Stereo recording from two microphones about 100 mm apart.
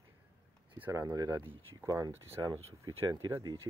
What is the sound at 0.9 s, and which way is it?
Speech, 35° right (ahead or behind).